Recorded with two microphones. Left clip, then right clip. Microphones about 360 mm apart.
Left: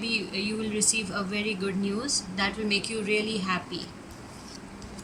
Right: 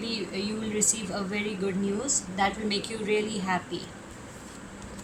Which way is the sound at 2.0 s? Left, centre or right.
Right.